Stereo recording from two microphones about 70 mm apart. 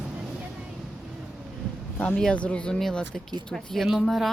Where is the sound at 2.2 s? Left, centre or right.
Centre.